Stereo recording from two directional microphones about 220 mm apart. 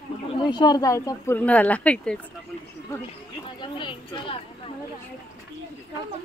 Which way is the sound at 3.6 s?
20° left (ahead or behind).